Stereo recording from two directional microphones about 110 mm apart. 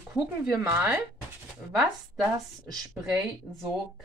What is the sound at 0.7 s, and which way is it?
Speech, 15° right (ahead or behind).